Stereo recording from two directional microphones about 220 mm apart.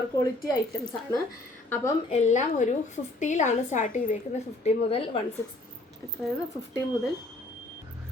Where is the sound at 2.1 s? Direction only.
30° left (ahead or behind).